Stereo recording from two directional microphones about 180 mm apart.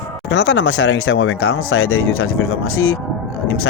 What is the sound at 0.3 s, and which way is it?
Speech, 85° left.